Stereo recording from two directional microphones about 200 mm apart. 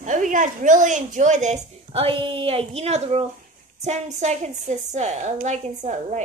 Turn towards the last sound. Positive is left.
turn(degrees=-35)  # may be behind; listen again after turning